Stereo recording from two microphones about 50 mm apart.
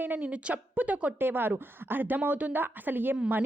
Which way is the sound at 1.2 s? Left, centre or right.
Right.